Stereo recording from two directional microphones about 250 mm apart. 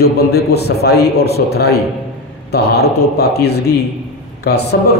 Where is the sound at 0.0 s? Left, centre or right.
Left.